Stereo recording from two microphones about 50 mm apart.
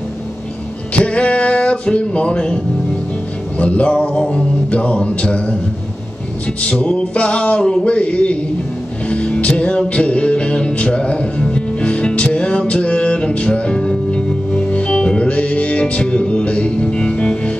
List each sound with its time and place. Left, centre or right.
0.9 s a sound: left
3.5 s music: left
6.6 s music: left